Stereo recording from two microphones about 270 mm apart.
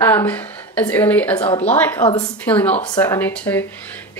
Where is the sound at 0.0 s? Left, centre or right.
Centre.